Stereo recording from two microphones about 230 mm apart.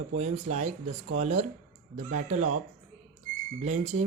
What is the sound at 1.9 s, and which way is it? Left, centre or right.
Speech, right.